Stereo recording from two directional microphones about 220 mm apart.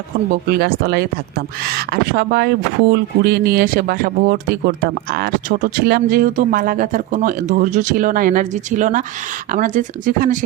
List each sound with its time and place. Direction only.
0.4 s speech: 45° right (ahead or behind)